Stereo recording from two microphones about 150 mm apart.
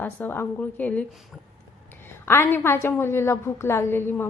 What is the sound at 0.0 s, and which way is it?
A woman's voice, 10° left (ahead or behind).